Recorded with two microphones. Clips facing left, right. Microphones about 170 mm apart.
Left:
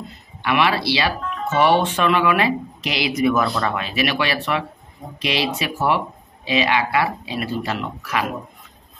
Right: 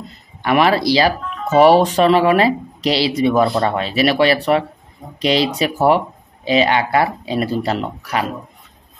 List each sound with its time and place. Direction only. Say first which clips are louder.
0.4 s speech: right 5 dB; 40° right (ahead or behind)